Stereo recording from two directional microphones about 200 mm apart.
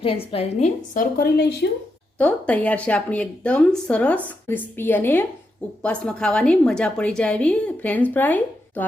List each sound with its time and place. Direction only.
0.0 s a woman's voice: 25° left (ahead or behind)
0.9 s a woman's voice: 50° left (ahead or behind)
2.1 s a woman's voice: 10° left (ahead or behind)